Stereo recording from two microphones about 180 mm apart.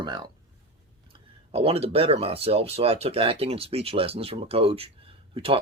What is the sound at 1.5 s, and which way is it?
Speech, 35° right (ahead or behind).